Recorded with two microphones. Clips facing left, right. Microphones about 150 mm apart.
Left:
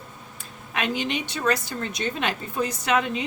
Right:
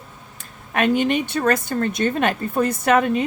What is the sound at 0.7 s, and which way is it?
A woman's voice, 50° right (ahead or behind).